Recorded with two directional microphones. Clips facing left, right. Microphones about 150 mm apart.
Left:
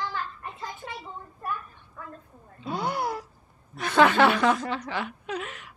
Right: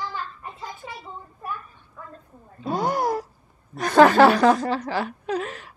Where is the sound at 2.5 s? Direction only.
45° right (ahead or behind).